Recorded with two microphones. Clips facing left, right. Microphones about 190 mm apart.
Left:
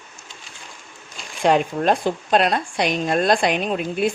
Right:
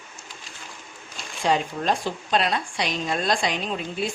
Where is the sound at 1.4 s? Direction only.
60° left (ahead or behind).